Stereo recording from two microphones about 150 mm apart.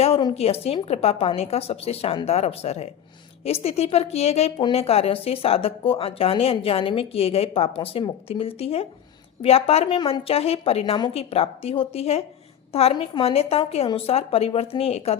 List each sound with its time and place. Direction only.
0.3 s a woman's voice: 40° left (ahead or behind)